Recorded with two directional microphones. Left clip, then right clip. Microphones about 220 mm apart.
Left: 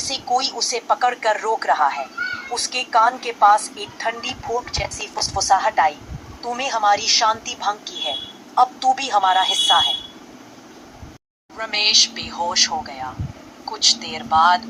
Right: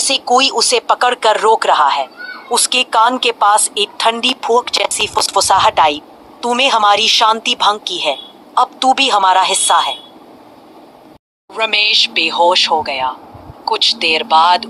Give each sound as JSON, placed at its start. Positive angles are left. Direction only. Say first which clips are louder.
{"t": 0.0, "sound": "a woman's voice", "louder": "right 9 dB", "side_deg": -40}
{"t": 11.5, "sound": "speech", "louder": "right 5 dB", "side_deg": -40}